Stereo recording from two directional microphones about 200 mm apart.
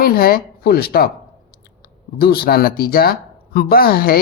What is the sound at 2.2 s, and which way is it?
Speech, 50° left (ahead or behind).